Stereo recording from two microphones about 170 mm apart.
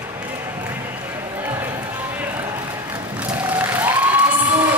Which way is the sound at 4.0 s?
10° right (ahead or behind).